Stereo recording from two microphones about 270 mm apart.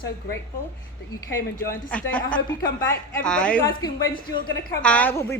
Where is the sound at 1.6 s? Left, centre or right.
Centre.